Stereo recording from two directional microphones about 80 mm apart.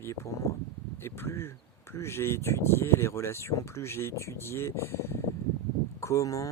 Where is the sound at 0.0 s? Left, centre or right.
Left.